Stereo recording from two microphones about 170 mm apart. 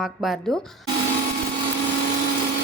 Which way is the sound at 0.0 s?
Centre (ahead or behind).